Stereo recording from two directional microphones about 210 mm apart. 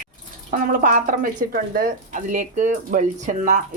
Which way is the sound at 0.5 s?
40° right (ahead or behind).